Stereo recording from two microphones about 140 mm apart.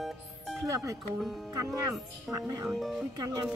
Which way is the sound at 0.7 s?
20° right (ahead or behind).